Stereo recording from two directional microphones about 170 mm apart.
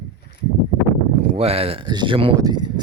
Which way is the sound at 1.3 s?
35° right (ahead or behind).